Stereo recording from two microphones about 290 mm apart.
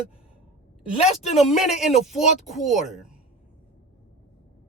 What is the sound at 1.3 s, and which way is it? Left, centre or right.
Speech, centre.